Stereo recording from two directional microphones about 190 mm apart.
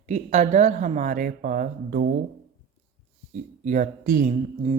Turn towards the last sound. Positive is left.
turn(degrees=-40)  # may be behind; listen again after turning